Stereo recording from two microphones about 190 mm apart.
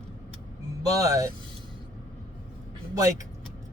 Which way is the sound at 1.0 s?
15° right (ahead or behind).